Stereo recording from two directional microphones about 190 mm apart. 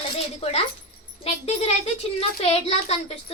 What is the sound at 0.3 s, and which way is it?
Speech, 35° left (ahead or behind).